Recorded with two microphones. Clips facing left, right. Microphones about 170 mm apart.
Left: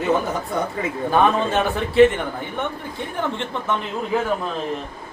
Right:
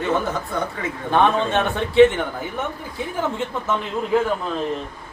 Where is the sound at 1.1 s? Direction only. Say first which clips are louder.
Even; centre (ahead or behind).